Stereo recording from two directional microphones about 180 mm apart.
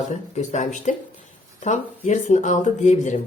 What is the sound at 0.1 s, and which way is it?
Speech, 40° left (ahead or behind).